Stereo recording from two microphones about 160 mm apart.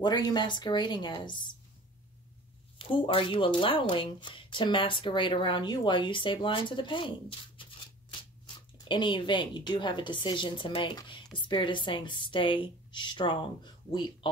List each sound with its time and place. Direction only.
0.0 s a woman's voice: 25° left (ahead or behind)
2.8 s speech: 35° left (ahead or behind)